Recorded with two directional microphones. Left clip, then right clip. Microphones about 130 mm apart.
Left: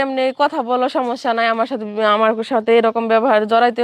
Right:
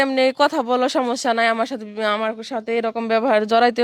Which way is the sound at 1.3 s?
20° right (ahead or behind).